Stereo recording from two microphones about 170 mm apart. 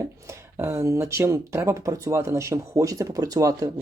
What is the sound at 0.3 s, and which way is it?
Speech, 15° right (ahead or behind).